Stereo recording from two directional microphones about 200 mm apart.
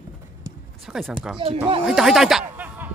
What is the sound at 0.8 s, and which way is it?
Speech, centre (ahead or behind).